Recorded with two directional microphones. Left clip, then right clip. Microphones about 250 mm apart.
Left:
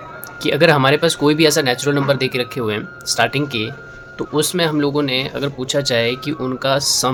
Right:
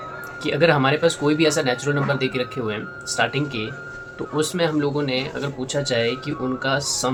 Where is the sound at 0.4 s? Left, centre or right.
Left.